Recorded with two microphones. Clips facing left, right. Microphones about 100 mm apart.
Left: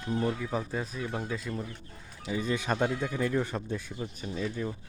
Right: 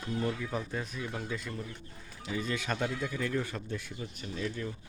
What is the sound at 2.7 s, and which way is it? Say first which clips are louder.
Speech: left 4 dB; 40° left (ahead or behind).